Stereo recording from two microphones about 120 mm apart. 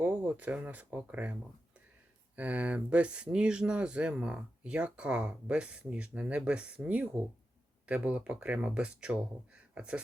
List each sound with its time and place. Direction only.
0.0 s speech: 15° right (ahead or behind)